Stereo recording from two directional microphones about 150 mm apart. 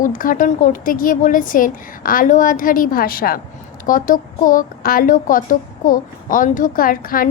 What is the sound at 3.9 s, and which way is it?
A woman's voice, 65° left (ahead or behind).